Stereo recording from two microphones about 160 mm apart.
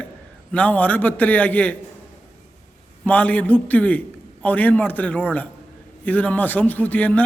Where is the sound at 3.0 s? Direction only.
10° left (ahead or behind).